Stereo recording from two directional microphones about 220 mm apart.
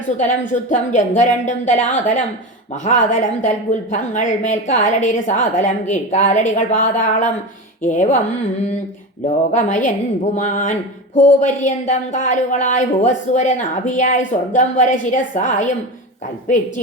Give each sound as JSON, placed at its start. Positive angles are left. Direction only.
{"t": 0.2, "sound": "a woman's voice", "side_deg": 35}
{"t": 9.2, "sound": "a woman's voice", "side_deg": 30}